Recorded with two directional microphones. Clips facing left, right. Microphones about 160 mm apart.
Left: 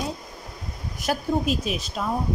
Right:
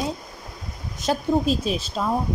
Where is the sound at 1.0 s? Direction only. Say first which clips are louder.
Right 3 dB; 30° right (ahead or behind).